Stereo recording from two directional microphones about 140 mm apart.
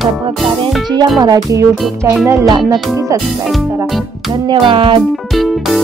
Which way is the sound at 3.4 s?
Centre (ahead or behind).